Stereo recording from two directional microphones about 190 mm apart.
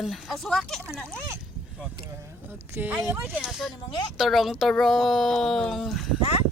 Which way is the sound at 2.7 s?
10° right (ahead or behind).